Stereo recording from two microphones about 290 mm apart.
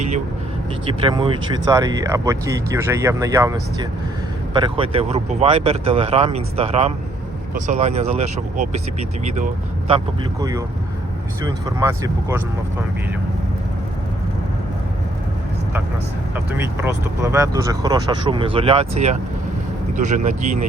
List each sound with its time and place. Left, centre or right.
0.9 s speech: centre
11.4 s speech: centre
16.3 s speech: centre; by 20.7 s right